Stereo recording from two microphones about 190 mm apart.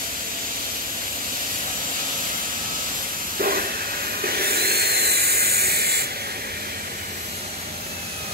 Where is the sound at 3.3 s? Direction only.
50° right (ahead or behind).